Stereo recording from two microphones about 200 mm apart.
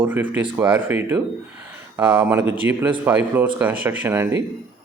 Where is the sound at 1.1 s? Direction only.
20° right (ahead or behind).